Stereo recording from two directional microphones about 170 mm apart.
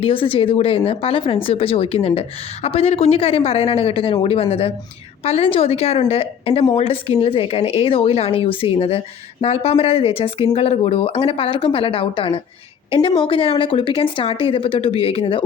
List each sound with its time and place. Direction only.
0.0 s speech: 30° left (ahead or behind)